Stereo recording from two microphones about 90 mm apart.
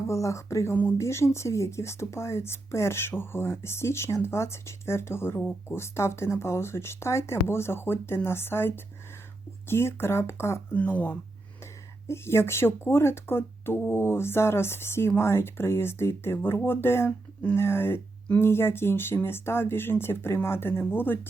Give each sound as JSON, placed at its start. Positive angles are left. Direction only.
{"t": 0.1, "sound": "speech", "side_deg": 35}
{"t": 10.7, "sound": "speech", "side_deg": 15}
{"t": 12.0, "sound": "speech", "side_deg": 30}
{"t": 17.1, "sound": "speech", "side_deg": 15}
{"t": 17.6, "sound": "speech", "side_deg": 25}